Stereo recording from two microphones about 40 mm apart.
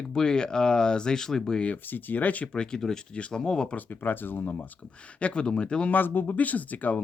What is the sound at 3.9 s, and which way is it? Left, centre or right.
Speech, left.